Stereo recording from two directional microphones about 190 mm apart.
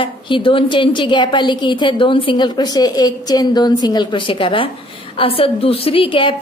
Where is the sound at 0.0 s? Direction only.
25° left (ahead or behind).